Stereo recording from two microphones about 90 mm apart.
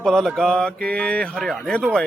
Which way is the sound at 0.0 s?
5° left (ahead or behind).